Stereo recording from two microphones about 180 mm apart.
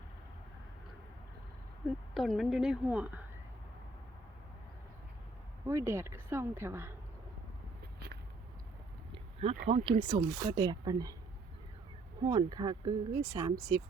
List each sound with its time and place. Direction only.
2.1 s a woman's voice: centre (ahead or behind)
5.6 s speech: 15° right (ahead or behind)
7.9 s a sound: 60° right (ahead or behind)
9.1 s a sound: 35° right (ahead or behind)
9.6 s speech: 35° right (ahead or behind)
12.2 s speech: 25° right (ahead or behind)